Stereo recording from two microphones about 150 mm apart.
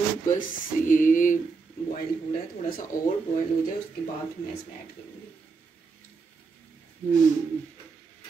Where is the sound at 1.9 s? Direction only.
70° left (ahead or behind).